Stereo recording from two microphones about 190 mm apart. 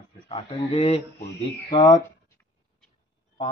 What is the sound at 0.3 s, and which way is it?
Speech, 30° left (ahead or behind).